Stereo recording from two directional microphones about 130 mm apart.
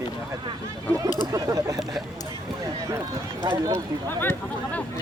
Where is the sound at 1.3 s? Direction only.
25° right (ahead or behind).